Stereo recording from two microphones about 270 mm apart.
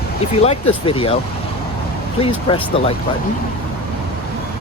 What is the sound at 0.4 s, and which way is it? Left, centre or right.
Speech, left.